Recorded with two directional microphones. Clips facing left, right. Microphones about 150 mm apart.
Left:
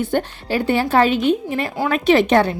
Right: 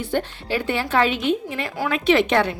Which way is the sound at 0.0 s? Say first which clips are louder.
Left 4 dB; 45° left (ahead or behind).